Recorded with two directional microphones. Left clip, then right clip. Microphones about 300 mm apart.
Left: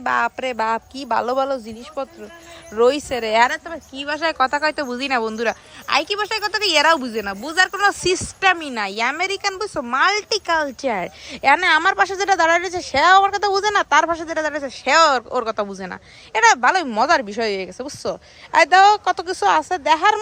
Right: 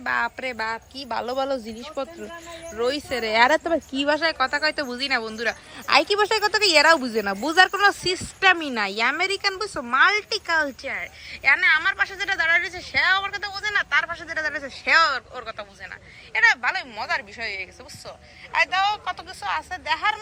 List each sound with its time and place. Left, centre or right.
0.0 s speech: centre